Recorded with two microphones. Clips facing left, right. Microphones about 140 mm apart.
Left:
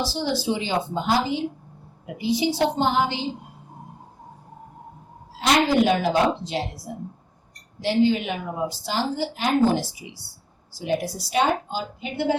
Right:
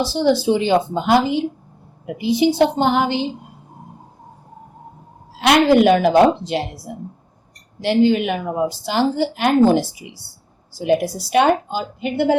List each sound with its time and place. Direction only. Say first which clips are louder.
0.0 s a woman's voice: right 8 dB; 55° right (ahead or behind)
5.4 s a woman's voice: right 6 dB; 65° right (ahead or behind)